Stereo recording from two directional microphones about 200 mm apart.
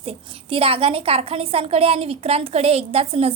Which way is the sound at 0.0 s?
30° right (ahead or behind).